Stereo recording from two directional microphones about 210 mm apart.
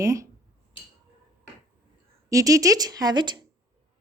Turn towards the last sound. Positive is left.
turn(degrees=-20)  # may be behind; listen again after turning